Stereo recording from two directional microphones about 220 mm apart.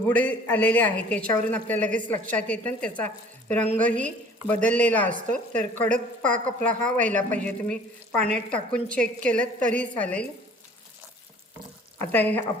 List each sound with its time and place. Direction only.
0.1 s a woman's voice: 5° left (ahead or behind)
9.4 s a woman's voice: 35° right (ahead or behind)
9.8 s a woman's voice: 5° left (ahead or behind)
11.9 s a woman's voice: 10° left (ahead or behind)